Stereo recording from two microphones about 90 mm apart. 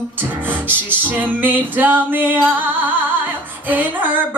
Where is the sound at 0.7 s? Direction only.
20° right (ahead or behind).